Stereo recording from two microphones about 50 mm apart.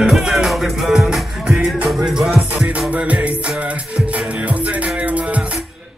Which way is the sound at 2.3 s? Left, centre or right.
Right.